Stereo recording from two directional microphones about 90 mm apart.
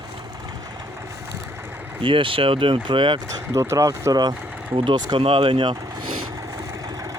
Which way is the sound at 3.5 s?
35° right (ahead or behind).